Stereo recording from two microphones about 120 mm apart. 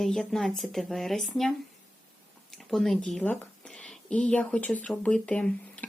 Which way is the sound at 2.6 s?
Centre (ahead or behind).